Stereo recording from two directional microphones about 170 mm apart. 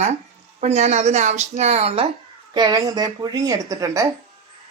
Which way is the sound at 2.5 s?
25° right (ahead or behind).